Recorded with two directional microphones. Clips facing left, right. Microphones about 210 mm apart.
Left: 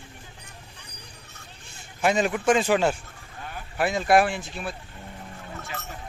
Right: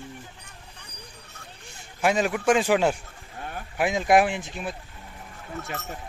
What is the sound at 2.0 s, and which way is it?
Speech, 5° right (ahead or behind).